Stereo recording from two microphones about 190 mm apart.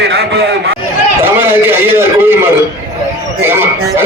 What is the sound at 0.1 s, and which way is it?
Speech, 55° right (ahead or behind).